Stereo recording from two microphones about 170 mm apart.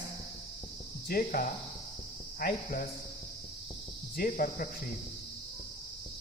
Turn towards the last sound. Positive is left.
turn(degrees=55)  # may be behind; listen again after turning